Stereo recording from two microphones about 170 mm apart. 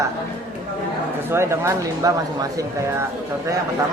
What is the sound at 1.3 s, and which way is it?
Speech, 15° right (ahead or behind).